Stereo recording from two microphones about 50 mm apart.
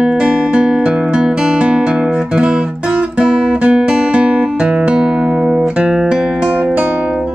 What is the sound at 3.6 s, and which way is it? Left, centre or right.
Music, right.